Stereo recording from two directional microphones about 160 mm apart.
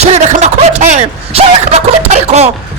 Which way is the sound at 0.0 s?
45° right (ahead or behind).